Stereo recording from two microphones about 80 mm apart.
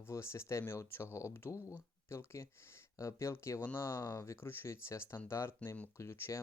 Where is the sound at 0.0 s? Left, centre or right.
Left.